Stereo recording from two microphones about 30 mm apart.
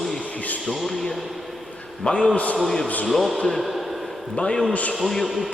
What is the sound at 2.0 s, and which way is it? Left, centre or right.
Speech, left.